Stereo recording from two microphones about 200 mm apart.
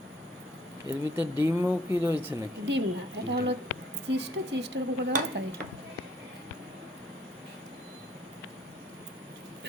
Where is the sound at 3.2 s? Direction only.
60° right (ahead or behind).